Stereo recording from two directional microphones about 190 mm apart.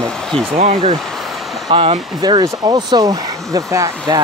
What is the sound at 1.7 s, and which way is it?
Speech, 25° right (ahead or behind).